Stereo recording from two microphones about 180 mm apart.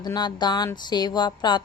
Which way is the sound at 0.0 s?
25° left (ahead or behind).